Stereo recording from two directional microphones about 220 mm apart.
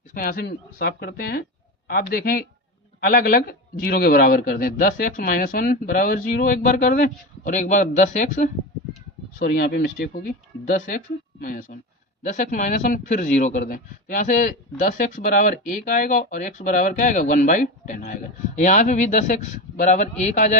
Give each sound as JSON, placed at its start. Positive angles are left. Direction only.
{"t": 0.1, "sound": "speech", "side_deg": 40}